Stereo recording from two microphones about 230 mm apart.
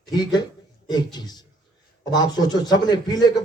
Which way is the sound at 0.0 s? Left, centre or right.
Centre.